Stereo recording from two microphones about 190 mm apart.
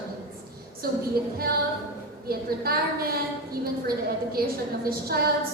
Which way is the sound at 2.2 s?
50° right (ahead or behind).